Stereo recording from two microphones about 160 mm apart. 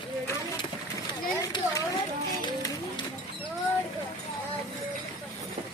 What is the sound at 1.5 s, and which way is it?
Children playing, 30° left (ahead or behind).